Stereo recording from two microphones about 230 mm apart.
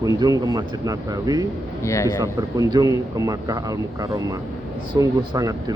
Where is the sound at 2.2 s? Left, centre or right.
Centre.